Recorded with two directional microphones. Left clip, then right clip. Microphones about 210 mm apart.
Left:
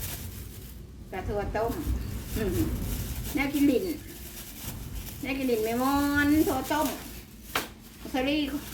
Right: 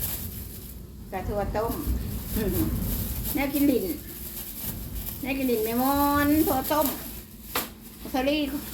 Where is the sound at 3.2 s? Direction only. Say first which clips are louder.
Right 1 dB; centre (ahead or behind).